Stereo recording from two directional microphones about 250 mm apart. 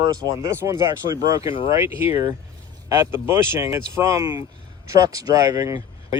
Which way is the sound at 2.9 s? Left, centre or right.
Centre.